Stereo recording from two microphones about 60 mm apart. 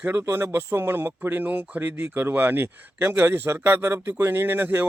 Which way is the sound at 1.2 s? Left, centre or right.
Right.